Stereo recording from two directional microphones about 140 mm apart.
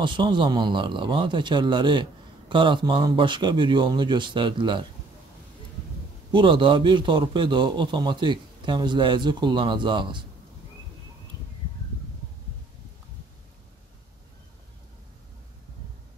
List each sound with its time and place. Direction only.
0.0 s a man's voice: 35° right (ahead or behind)
6.3 s a man's voice: 35° right (ahead or behind)